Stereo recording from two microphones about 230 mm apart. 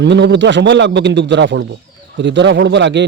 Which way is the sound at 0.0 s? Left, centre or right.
Right.